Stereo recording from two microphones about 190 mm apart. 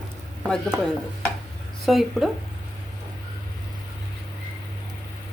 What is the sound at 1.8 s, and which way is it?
Speech, centre (ahead or behind).